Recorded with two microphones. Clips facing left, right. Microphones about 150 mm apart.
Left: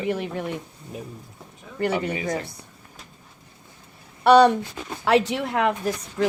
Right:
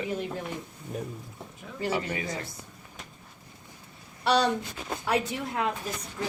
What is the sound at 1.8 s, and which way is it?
Speech, 65° left (ahead or behind).